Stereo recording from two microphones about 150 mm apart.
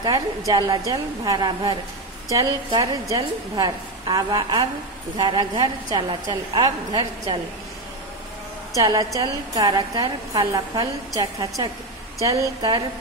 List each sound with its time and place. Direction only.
0.5 s a woman's voice: 25° right (ahead or behind)
8.7 s a woman's voice: 25° right (ahead or behind)